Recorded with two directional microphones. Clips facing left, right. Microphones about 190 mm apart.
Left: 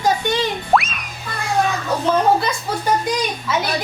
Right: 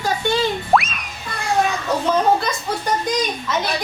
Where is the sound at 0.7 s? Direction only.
Centre (ahead or behind).